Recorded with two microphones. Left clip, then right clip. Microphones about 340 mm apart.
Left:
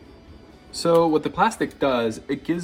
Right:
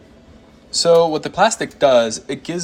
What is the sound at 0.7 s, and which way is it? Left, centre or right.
Speech, centre.